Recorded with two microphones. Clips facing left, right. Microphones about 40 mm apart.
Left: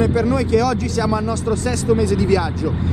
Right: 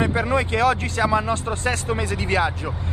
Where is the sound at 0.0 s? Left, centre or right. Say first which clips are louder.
Left 4 dB; right.